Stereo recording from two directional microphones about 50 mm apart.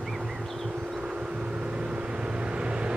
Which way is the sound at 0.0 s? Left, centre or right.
Centre.